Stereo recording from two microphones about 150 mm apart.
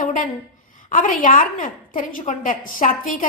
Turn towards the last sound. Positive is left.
turn(degrees=65)  # may be behind; listen again after turning